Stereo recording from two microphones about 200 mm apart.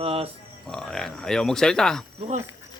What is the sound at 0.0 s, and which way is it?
Speech, 30° right (ahead or behind).